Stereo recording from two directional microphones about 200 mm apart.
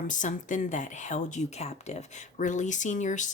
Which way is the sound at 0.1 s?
40° left (ahead or behind).